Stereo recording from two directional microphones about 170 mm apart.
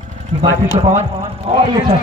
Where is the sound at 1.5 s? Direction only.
30° right (ahead or behind).